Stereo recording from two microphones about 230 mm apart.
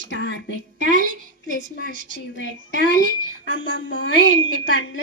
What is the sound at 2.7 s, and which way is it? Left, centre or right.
Speech, right.